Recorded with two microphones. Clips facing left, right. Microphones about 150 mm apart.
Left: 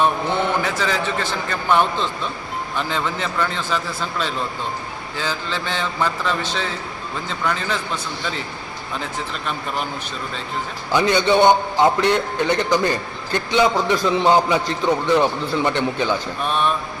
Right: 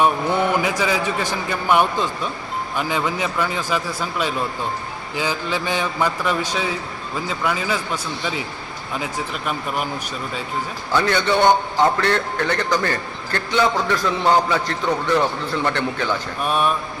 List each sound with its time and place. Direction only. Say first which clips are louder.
0.0 s a man's voice: right 1 dB; 10° right (ahead or behind)
10.9 s a man's voice: left 2 dB; 20° left (ahead or behind)
16.4 s a man's voice: right 2 dB; 10° right (ahead or behind)